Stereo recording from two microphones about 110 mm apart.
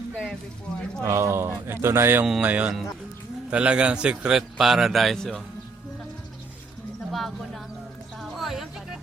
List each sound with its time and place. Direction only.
0.1 s speech: 5° left (ahead or behind)
1.0 s speech: 25° right (ahead or behind)
2.2 s a man's voice: 10° right (ahead or behind)
7.1 s speech: centre (ahead or behind)
8.2 s music: centre (ahead or behind)